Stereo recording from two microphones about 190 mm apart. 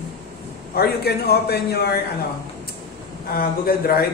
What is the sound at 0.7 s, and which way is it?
A man's voice, 55° left (ahead or behind).